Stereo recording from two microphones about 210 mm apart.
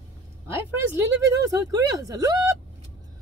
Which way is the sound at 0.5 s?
15° right (ahead or behind).